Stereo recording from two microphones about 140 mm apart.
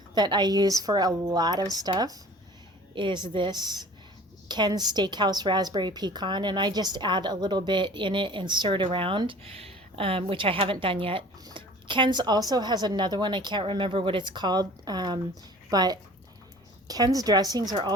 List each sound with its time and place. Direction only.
0.1 s a woman's voice: 30° right (ahead or behind)